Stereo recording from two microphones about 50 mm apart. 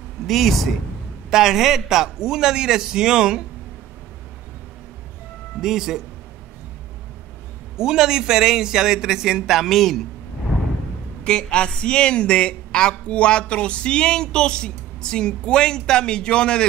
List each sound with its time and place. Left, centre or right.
0.3 s a man's voice: centre
5.6 s a man's voice: centre
7.7 s a man's voice: centre
11.2 s speech: centre